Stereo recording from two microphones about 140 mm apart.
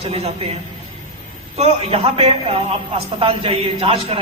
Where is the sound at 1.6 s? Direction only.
45° right (ahead or behind).